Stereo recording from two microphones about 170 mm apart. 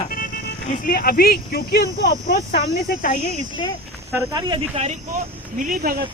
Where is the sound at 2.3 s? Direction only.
55° left (ahead or behind).